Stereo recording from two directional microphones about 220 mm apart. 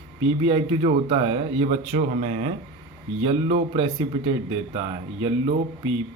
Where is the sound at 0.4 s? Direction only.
20° right (ahead or behind).